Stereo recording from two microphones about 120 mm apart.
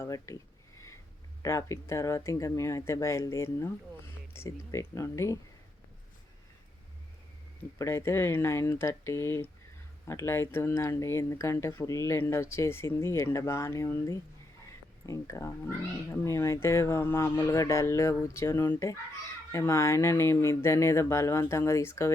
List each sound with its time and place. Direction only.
0.0 s speech: 25° left (ahead or behind)
1.4 s speech: 30° left (ahead or behind)
7.8 s speech: 20° left (ahead or behind)
17.3 s speech: 30° left (ahead or behind)